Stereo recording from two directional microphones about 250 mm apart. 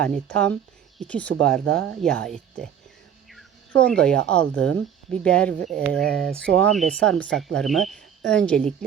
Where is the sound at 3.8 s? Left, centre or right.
Centre.